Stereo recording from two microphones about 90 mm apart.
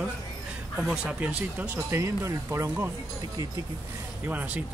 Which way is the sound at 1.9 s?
30° right (ahead or behind).